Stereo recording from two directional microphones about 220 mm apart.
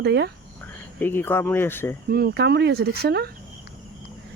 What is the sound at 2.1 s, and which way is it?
Speech, 45° right (ahead or behind).